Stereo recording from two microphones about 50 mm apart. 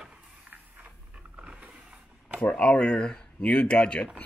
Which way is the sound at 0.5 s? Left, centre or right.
Right.